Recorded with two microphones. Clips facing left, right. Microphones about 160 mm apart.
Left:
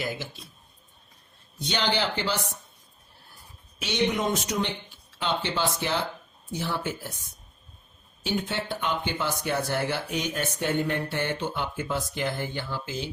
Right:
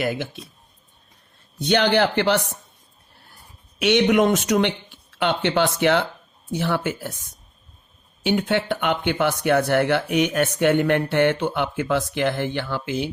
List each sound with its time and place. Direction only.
0.0 s speech: 60° right (ahead or behind)
1.5 s speech: 60° right (ahead or behind)
3.8 s speech: 70° right (ahead or behind)
8.2 s speech: 70° right (ahead or behind)